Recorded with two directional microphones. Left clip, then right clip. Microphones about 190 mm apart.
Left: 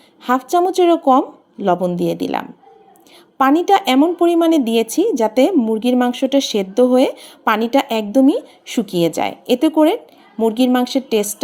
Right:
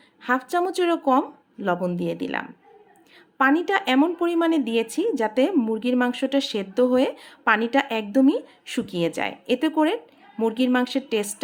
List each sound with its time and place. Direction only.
0.2 s a woman's voice: 15° left (ahead or behind)